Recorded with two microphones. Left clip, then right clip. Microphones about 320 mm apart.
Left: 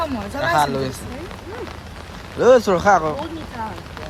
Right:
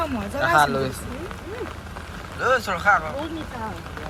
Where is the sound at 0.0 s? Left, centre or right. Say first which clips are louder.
Left 1 dB; centre.